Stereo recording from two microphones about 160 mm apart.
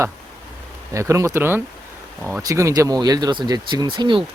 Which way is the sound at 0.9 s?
20° right (ahead or behind).